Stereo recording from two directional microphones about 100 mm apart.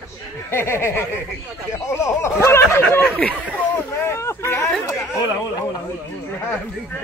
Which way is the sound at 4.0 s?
25° left (ahead or behind).